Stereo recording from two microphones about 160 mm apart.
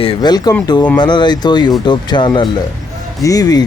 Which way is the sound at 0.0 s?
30° left (ahead or behind).